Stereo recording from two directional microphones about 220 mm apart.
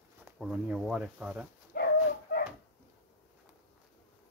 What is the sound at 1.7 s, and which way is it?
Dog, 45° left (ahead or behind).